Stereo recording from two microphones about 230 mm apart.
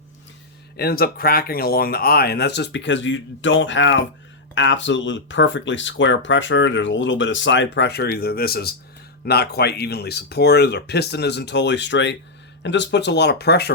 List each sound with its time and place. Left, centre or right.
0.8 s speech: left